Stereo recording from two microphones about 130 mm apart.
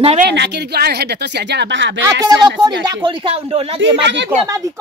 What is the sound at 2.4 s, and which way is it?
Speech, 35° right (ahead or behind).